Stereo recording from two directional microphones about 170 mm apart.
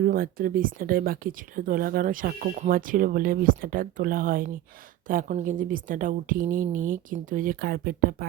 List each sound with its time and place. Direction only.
0.0 s a woman's voice: 55° right (ahead or behind)